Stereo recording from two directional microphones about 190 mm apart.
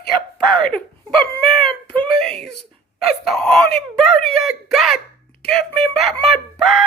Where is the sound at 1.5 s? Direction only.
Centre (ahead or behind).